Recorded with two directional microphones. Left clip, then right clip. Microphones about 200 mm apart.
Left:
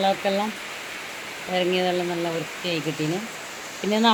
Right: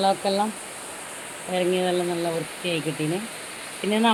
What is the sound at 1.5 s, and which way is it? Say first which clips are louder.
Speech: even; 5° right (ahead or behind).